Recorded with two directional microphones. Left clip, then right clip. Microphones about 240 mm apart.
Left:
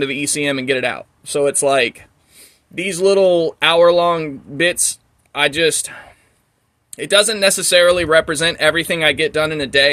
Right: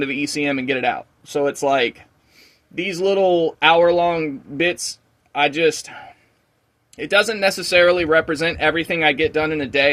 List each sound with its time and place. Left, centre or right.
0.0 s speech: left